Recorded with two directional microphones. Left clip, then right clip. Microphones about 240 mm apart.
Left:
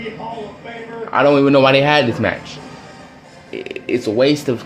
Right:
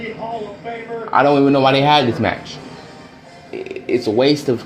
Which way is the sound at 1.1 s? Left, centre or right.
Centre.